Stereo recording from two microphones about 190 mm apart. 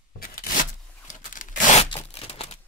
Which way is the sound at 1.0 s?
45° left (ahead or behind).